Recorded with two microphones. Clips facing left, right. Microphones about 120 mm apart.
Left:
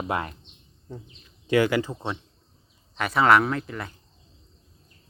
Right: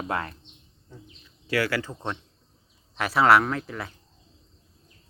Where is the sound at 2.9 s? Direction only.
Centre (ahead or behind).